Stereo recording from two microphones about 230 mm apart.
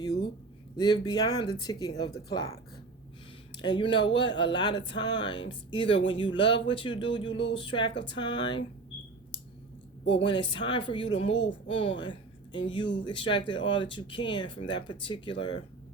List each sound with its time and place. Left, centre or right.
0.8 s speech: centre
3.6 s speech: left
10.1 s a woman's voice: left